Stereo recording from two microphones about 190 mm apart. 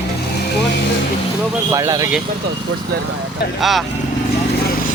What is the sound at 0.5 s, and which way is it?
Speech, 65° left (ahead or behind).